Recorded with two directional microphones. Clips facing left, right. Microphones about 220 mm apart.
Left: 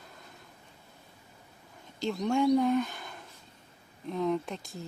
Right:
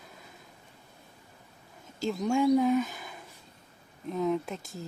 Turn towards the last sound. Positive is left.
turn(degrees=-5)  # may be behind; listen again after turning